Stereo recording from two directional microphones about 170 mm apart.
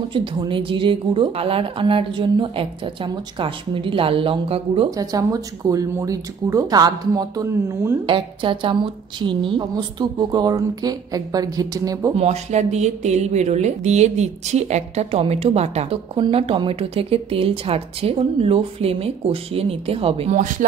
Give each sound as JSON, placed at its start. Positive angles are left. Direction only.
{"t": 0.1, "sound": "speech", "side_deg": -30}
{"t": 4.9, "sound": "a woman's voice", "side_deg": -20}
{"t": 12.2, "sound": "speech", "side_deg": -40}
{"t": 20.3, "sound": "speech", "side_deg": -50}